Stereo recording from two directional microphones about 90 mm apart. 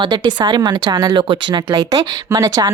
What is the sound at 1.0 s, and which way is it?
Speech, 65° right (ahead or behind).